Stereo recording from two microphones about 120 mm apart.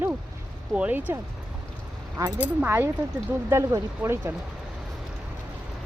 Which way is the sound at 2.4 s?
20° right (ahead or behind).